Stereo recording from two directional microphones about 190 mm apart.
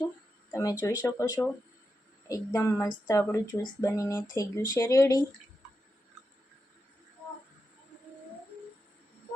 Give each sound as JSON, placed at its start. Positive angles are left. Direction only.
{"t": 0.5, "sound": "speech", "side_deg": 15}